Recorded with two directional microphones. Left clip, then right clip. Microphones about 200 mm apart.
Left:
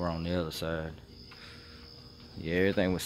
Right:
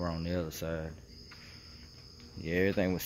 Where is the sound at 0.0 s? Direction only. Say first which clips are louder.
Left 3 dB; 5° left (ahead or behind).